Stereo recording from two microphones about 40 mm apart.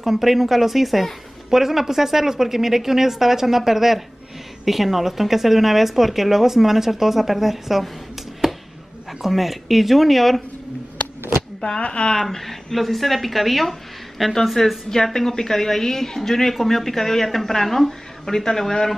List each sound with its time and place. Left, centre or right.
0.0 s a woman's voice: centre
9.2 s speech: centre
11.8 s speech: left
12.2 s speech: centre
14.6 s speech: centre